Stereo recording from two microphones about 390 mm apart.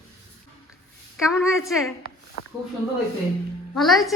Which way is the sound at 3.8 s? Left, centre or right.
Centre.